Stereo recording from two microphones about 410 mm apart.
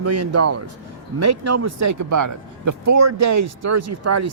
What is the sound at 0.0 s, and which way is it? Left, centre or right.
Speech, right.